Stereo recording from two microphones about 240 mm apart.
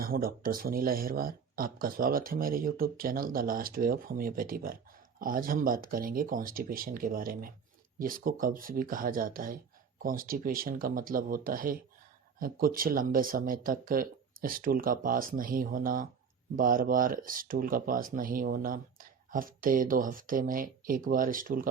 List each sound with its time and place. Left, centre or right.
0.0 s speech: right